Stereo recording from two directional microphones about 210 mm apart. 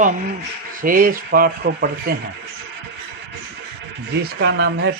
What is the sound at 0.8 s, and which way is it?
Speech, 40° right (ahead or behind).